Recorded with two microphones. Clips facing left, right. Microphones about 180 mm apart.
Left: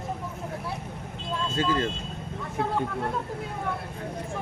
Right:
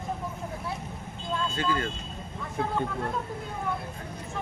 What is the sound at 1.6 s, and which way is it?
Speech, 25° left (ahead or behind).